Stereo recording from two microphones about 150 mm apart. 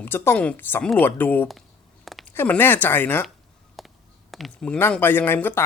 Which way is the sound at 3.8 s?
Centre (ahead or behind).